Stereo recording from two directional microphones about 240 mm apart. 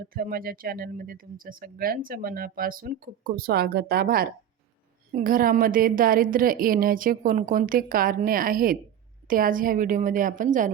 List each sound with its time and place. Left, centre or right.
0.1 s speech: right